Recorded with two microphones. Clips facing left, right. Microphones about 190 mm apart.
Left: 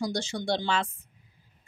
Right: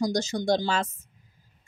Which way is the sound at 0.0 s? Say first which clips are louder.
Right 5 dB; 40° right (ahead or behind).